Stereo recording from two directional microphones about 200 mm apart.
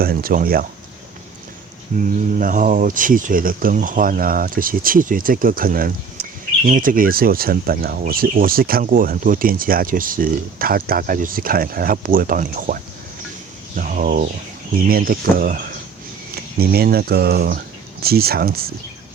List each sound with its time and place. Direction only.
0.0 s speech: 45° right (ahead or behind)
1.9 s speech: 40° right (ahead or behind)